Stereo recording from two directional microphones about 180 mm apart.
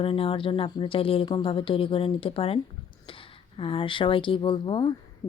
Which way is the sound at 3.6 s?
30° left (ahead or behind).